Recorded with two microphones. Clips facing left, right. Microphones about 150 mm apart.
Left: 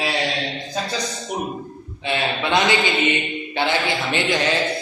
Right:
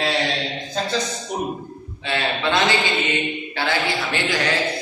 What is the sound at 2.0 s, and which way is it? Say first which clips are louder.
A man's voice: even; 15° left (ahead or behind).